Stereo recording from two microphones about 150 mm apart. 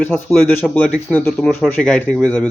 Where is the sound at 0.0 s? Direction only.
15° left (ahead or behind).